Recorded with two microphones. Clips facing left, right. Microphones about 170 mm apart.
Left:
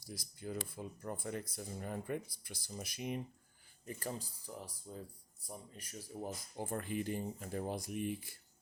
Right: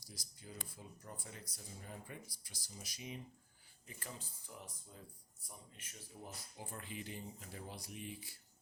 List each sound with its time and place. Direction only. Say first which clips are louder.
0.1 s speech: left 11 dB; 55° left (ahead or behind)
3.8 s speech: left 9 dB; 40° left (ahead or behind)
6.6 s speech: left 10 dB; 50° left (ahead or behind)